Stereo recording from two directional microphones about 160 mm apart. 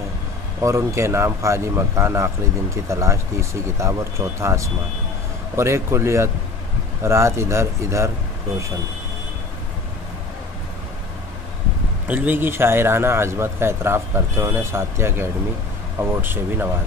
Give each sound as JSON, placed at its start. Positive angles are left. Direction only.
{"t": 0.6, "sound": "a man's voice", "side_deg": -15}
{"t": 12.1, "sound": "a man's voice", "side_deg": -10}